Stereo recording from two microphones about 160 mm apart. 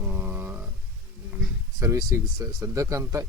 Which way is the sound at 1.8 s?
20° right (ahead or behind).